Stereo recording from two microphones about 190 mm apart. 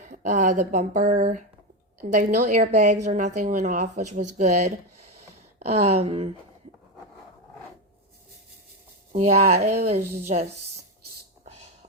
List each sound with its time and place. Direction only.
0.0 s a woman's voice: 40° right (ahead or behind)
9.1 s a woman's voice: 35° right (ahead or behind)